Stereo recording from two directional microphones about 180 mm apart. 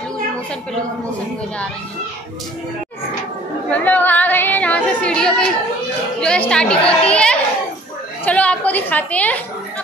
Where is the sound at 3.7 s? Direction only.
10° left (ahead or behind).